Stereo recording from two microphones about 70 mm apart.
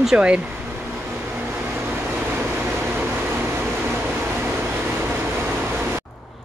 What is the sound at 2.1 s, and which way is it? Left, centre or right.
Vehicle, right.